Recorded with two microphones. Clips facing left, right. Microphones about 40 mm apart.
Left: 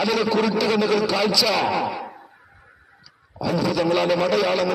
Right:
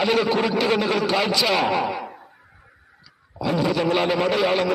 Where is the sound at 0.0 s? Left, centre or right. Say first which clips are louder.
Even; right.